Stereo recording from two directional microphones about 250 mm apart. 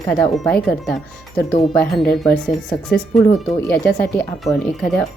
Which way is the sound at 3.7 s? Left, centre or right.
Left.